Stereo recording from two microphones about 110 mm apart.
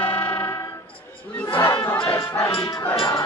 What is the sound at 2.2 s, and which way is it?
Music, 25° left (ahead or behind).